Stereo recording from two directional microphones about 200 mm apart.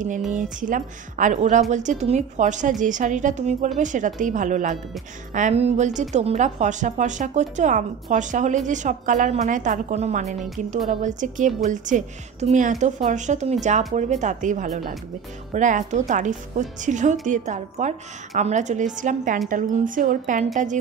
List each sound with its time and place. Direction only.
0.3 s a woman's voice: 40° right (ahead or behind)